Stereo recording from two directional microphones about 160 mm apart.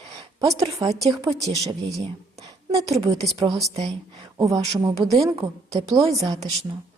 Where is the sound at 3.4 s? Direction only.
20° right (ahead or behind).